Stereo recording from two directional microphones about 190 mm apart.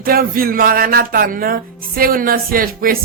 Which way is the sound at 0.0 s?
50° right (ahead or behind).